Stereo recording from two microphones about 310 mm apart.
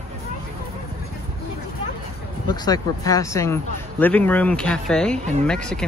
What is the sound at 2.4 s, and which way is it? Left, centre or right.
Speech, centre.